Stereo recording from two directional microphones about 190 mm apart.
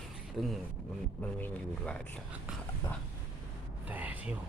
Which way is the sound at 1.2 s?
10° left (ahead or behind).